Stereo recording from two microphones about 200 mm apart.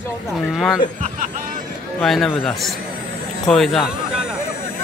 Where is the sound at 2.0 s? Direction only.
Centre (ahead or behind).